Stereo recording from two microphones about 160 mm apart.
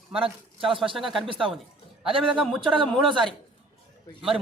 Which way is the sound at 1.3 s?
35° right (ahead or behind).